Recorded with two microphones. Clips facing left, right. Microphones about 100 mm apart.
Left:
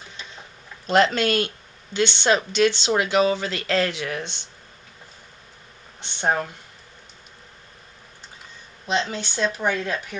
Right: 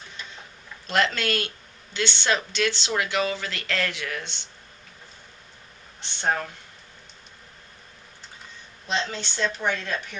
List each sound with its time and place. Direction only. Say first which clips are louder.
0.9 s speech: left 6 dB; 25° left (ahead or behind)
6.1 s speech: left 3 dB; 20° left (ahead or behind)
8.9 s speech: left 4 dB; 15° left (ahead or behind)